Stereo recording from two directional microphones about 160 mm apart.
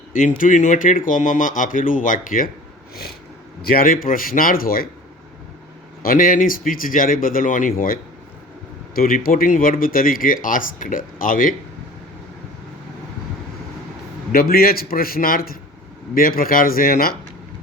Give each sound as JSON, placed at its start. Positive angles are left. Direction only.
{"t": 0.1, "sound": "speech", "side_deg": 60}
{"t": 3.6, "sound": "speech", "side_deg": 70}
{"t": 6.0, "sound": "speech", "side_deg": 60}
{"t": 9.0, "sound": "speech", "side_deg": 65}
{"t": 14.3, "sound": "a man's voice", "side_deg": 70}